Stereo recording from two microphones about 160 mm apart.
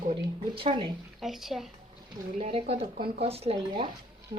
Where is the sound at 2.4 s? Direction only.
40° right (ahead or behind).